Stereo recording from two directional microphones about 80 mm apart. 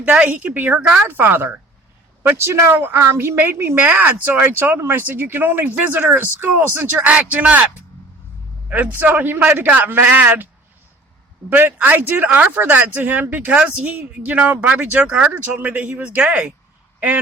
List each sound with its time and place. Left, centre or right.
0.0 s speech: centre
1.0 s speech: right
2.2 s speech: right; by 7.7 s centre
8.7 s speech: right